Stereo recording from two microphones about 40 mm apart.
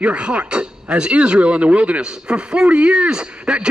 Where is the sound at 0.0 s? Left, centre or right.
Right.